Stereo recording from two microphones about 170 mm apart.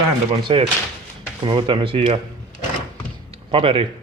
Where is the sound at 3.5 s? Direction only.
30° right (ahead or behind).